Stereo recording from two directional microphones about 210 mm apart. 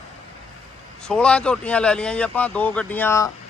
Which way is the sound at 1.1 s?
5° left (ahead or behind).